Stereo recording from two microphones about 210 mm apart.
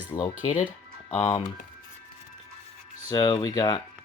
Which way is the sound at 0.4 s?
35° left (ahead or behind).